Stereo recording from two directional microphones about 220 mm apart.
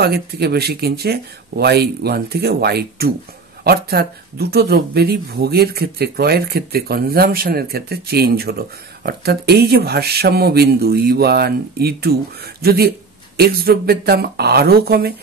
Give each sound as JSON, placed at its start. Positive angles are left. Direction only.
{"t": 0.0, "sound": "speech", "side_deg": -45}